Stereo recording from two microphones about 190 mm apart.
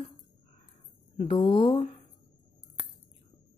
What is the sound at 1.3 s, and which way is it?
Speech, 25° left (ahead or behind).